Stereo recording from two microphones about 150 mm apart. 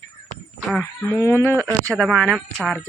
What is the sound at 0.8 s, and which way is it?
Speech, 15° left (ahead or behind).